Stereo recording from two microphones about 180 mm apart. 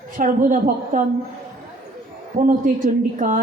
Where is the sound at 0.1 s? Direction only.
50° right (ahead or behind).